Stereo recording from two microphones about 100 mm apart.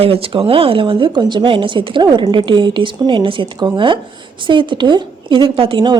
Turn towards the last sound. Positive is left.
turn(degrees=-55)  # may be behind; listen again after turning